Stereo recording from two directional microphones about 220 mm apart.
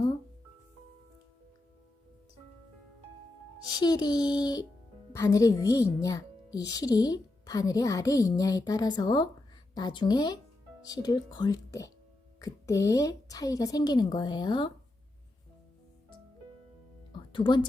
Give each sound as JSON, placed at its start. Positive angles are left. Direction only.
{"t": 3.8, "sound": "speech", "side_deg": 20}
{"t": 17.1, "sound": "music", "side_deg": 20}